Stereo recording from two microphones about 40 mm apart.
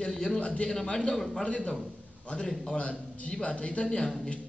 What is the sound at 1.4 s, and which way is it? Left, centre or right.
Speech, left.